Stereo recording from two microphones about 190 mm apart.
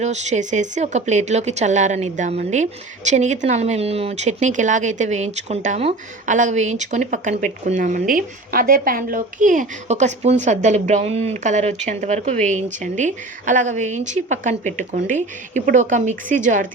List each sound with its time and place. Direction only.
0.0 s speech: 35° right (ahead or behind)